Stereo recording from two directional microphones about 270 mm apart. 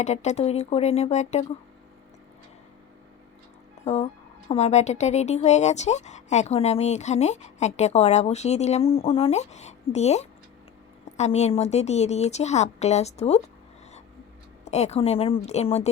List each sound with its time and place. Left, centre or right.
0.0 s speech: left
3.8 s speech: left
14.6 s speech: left